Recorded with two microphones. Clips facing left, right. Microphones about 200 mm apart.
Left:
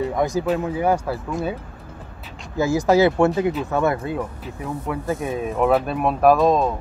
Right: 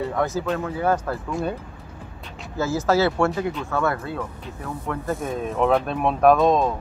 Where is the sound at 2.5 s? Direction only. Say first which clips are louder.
Left 4 dB; 15° left (ahead or behind).